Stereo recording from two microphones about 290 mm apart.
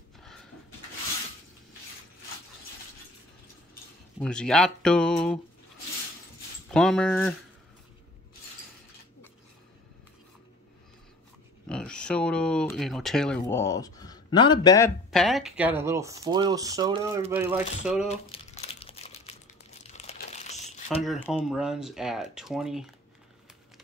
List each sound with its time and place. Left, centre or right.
0.2 s pant: centre
4.2 s speech: centre
6.7 s speech: centre
11.7 s speech: centre
15.0 s speech: centre
18.0 s crumpling: left
21.0 s speech: centre